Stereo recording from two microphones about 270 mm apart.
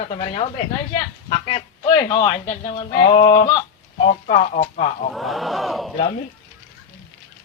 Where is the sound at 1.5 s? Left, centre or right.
Centre.